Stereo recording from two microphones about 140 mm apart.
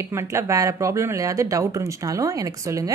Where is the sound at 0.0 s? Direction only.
20° right (ahead or behind).